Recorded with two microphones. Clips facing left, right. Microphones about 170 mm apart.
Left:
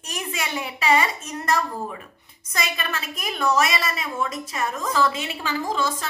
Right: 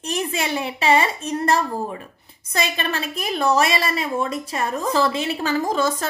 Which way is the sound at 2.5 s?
30° right (ahead or behind).